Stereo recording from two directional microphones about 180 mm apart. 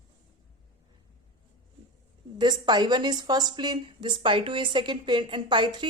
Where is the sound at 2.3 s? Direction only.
25° right (ahead or behind).